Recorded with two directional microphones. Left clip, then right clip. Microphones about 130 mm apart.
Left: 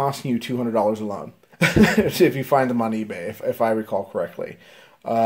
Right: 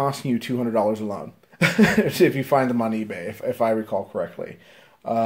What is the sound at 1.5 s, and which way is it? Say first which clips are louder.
Speech: left 1 dB; 25° left (ahead or behind).